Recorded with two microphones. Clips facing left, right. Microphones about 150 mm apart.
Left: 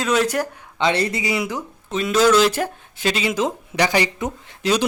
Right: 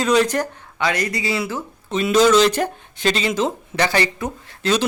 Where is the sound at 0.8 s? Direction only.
25° left (ahead or behind).